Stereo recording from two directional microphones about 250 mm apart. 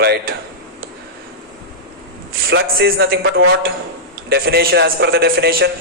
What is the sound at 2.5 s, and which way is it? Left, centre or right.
Speech, right.